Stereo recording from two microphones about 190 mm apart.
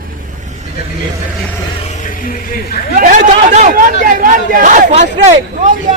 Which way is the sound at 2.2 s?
50° left (ahead or behind).